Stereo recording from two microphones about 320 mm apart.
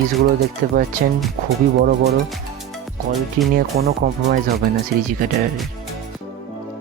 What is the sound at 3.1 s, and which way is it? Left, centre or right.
Speech, centre.